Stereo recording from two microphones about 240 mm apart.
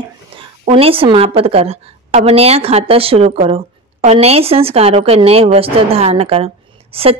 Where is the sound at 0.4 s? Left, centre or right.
Right.